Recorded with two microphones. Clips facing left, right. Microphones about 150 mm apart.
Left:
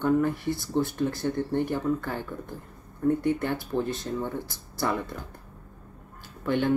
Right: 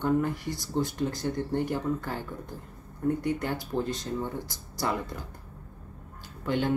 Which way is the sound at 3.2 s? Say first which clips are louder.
Left 3 dB; 15° right (ahead or behind).